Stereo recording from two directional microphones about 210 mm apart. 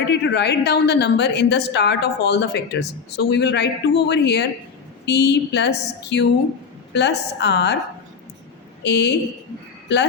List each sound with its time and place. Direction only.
0.1 s a woman's voice: 50° left (ahead or behind)
8.8 s a woman's voice: 55° left (ahead or behind)